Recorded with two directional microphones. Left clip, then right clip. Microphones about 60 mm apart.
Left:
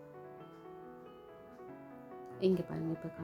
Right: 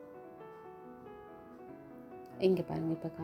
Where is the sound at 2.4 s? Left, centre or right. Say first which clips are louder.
Right 3 dB; right.